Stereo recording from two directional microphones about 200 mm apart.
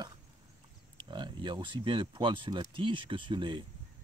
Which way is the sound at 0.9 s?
25° right (ahead or behind).